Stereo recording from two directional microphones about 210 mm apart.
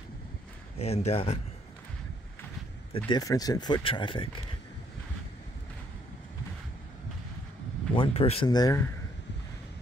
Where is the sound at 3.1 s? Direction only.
20° left (ahead or behind).